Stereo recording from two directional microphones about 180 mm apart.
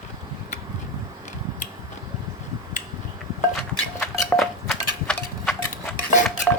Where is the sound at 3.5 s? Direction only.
5° left (ahead or behind).